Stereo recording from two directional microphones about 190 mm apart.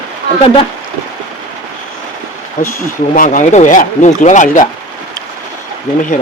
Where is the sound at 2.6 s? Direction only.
45° left (ahead or behind).